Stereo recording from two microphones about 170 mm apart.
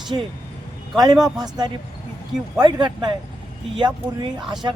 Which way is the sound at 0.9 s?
20° right (ahead or behind).